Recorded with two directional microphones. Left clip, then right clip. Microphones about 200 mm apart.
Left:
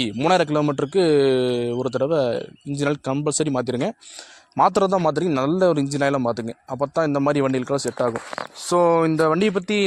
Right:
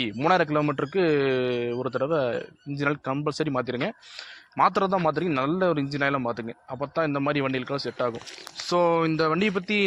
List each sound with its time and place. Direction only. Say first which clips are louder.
0.0 s a man's voice: left 3 dB; 50° left (ahead or behind)